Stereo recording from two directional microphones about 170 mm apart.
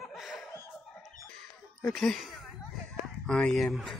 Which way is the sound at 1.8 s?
Centre (ahead or behind).